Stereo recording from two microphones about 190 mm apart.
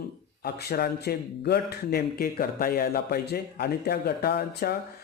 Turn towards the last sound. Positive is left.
turn(degrees=55)  # may be behind; listen again after turning